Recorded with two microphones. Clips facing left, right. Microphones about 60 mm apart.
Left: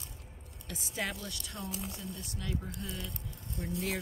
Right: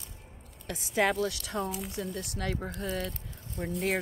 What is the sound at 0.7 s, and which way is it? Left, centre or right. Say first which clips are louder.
Speech: right 10 dB; right.